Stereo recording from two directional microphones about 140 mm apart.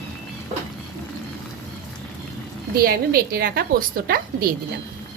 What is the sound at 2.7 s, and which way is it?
A woman's voice, 90° right.